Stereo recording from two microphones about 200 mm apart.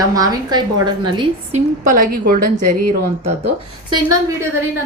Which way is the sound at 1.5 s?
40° right (ahead or behind).